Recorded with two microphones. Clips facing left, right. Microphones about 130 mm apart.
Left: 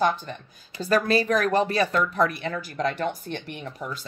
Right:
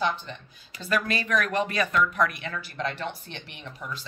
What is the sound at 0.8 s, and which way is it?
Speech, 35° left (ahead or behind).